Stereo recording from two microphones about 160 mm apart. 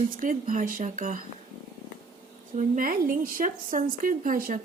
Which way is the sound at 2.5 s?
60° right (ahead or behind).